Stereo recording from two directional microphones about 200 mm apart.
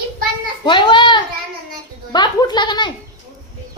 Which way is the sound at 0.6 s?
25° left (ahead or behind).